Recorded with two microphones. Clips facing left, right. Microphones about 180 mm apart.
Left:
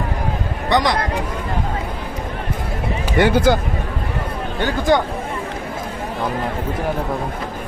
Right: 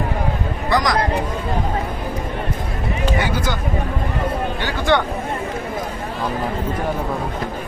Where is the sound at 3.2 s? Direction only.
60° left (ahead or behind).